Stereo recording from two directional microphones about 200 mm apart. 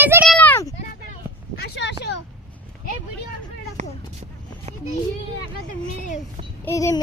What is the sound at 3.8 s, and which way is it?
Speech, 35° right (ahead or behind).